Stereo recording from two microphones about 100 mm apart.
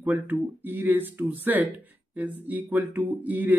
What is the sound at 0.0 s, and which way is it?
Speech, 20° right (ahead or behind).